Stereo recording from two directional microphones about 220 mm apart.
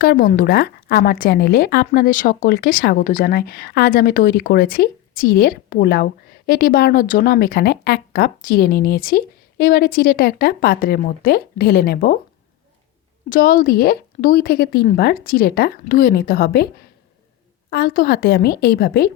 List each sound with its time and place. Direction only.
0.0 s a woman's voice: 40° left (ahead or behind)
13.3 s a woman's voice: 40° left (ahead or behind)
17.7 s a woman's voice: 45° left (ahead or behind)